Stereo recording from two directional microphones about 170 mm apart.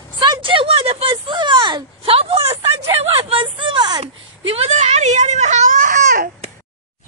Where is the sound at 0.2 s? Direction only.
30° right (ahead or behind); by 6.3 s 50° right (ahead or behind).